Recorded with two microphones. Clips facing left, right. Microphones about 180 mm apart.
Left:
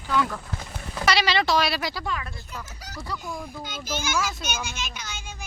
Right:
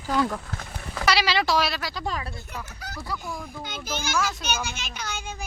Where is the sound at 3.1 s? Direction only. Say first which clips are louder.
Left 1 dB; centre (ahead or behind).